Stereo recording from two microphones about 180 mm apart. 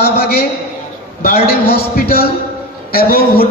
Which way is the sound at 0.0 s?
60° left (ahead or behind).